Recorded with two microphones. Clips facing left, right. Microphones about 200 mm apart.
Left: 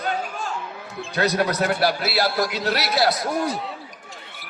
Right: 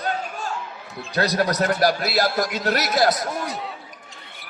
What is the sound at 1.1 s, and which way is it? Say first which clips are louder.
A man's voice: even; 35° right (ahead or behind).